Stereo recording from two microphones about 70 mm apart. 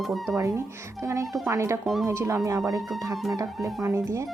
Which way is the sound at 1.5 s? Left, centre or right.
Right.